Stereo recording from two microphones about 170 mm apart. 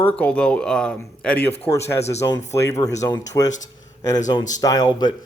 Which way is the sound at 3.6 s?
20° left (ahead or behind).